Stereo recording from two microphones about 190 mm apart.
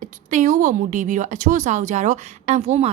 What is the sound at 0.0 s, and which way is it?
A woman's voice, 40° right (ahead or behind).